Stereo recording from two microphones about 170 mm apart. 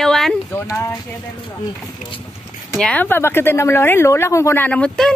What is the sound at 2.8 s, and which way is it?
A woman's voice, 10° left (ahead or behind).